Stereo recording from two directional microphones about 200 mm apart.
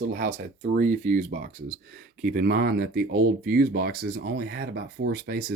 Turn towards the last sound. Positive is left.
turn(degrees=-50)  # may be behind; listen again after turning